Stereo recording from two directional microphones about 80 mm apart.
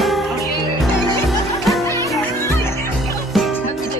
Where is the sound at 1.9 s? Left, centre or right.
Left.